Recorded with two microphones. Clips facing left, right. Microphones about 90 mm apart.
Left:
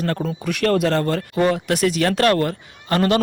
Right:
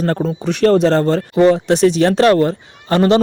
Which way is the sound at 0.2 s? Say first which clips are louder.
Right 6 dB; 25° right (ahead or behind).